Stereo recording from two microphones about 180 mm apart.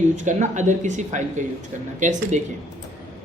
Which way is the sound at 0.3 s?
40° right (ahead or behind).